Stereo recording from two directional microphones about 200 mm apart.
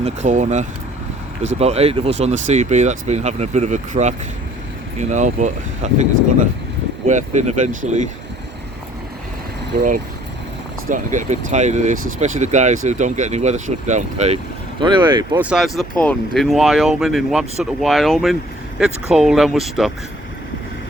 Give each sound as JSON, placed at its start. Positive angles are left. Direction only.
{"t": 0.0, "sound": "speech", "side_deg": -35}
{"t": 7.1, "sound": "speech", "side_deg": -40}
{"t": 9.7, "sound": "speech", "side_deg": -35}
{"t": 14.8, "sound": "speech", "side_deg": -25}
{"t": 15.4, "sound": "speech", "side_deg": -5}